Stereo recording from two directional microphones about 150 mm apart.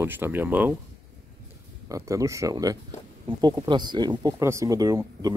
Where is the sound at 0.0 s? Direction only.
15° right (ahead or behind).